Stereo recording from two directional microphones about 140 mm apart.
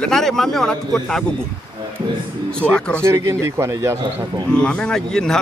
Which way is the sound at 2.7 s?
5° left (ahead or behind).